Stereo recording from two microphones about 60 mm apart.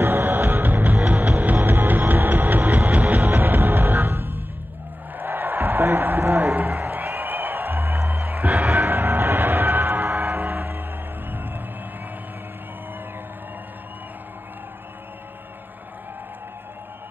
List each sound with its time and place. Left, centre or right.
0.0 s music: right